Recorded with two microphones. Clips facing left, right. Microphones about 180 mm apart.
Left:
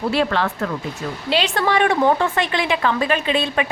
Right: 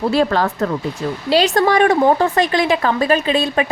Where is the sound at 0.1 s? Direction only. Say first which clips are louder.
Right 2 dB; 40° right (ahead or behind).